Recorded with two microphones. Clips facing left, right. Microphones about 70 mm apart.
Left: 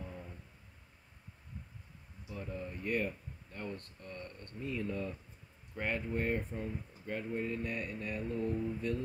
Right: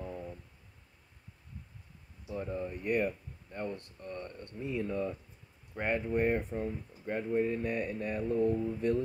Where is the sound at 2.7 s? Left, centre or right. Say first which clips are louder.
Right 4 dB; centre.